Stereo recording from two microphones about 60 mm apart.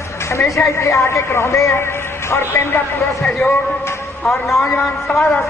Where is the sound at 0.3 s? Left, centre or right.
Left.